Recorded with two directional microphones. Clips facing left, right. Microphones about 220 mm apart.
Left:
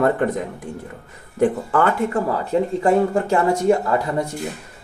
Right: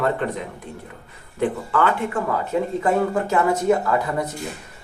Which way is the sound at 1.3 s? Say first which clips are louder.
Left 4 dB; 45° left (ahead or behind).